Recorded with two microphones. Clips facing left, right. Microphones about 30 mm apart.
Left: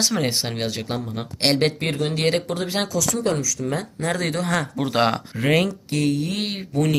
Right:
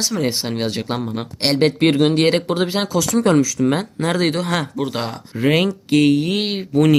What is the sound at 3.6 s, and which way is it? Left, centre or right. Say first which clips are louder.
Speech: right 8 dB; right.